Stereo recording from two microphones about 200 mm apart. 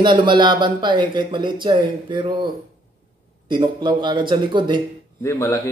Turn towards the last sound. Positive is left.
turn(degrees=10)  # may be behind; listen again after turning